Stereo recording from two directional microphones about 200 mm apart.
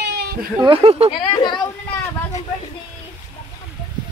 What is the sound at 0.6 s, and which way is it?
Speech, 25° right (ahead or behind).